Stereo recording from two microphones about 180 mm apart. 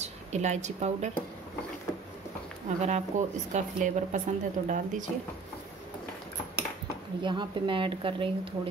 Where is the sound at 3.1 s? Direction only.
45° right (ahead or behind).